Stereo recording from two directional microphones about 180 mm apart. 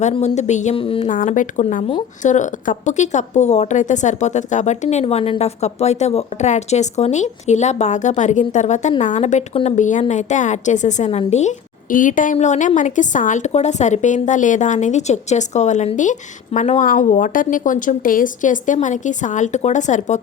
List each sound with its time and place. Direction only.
0.0 s a woman's voice: 40° left (ahead or behind)
1.1 s a woman's voice: 45° left (ahead or behind)